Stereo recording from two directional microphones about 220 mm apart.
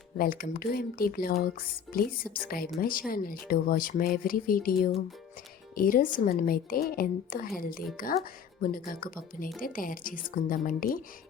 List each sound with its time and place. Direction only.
0.2 s speech: 40° left (ahead or behind)